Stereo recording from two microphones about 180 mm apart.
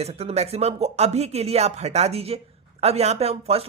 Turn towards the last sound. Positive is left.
turn(degrees=-35)  # may be behind; listen again after turning